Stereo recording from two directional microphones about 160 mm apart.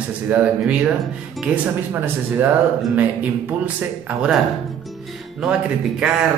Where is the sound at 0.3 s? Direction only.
10° right (ahead or behind).